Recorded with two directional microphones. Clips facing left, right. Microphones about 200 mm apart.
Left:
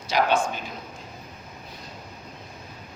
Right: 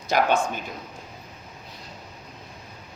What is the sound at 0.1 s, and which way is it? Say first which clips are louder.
Speech: right 1 dB; 50° right (ahead or behind).